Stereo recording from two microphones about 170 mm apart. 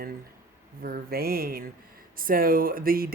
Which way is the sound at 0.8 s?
60° right (ahead or behind).